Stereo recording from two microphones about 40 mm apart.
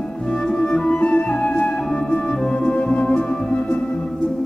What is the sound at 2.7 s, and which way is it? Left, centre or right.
Music, left.